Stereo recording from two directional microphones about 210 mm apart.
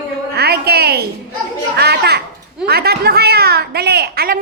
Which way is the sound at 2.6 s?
50° right (ahead or behind).